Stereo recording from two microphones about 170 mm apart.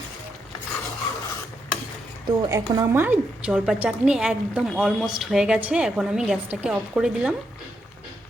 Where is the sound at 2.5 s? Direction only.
15° right (ahead or behind).